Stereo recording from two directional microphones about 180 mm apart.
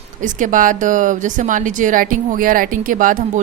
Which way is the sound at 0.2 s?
45° right (ahead or behind).